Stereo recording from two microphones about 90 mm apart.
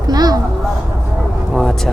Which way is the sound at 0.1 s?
45° right (ahead or behind).